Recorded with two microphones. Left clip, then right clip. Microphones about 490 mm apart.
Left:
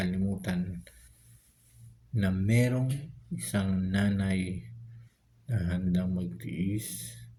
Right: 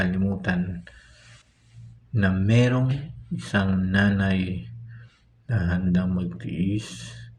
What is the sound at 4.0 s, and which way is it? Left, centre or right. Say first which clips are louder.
Mantra: right 10 dB; left.